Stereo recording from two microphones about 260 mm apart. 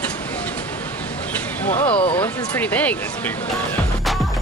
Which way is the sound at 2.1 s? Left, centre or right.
Centre.